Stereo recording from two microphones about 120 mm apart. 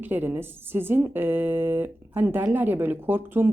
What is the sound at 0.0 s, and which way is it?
A woman's voice, 15° right (ahead or behind).